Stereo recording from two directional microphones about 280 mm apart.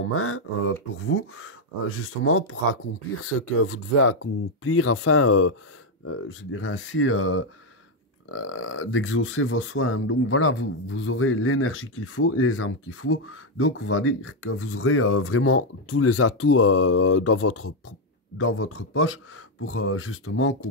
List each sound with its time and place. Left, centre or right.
0.0 s speech: left